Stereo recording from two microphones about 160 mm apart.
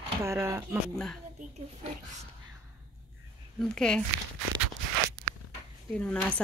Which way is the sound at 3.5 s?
5° left (ahead or behind).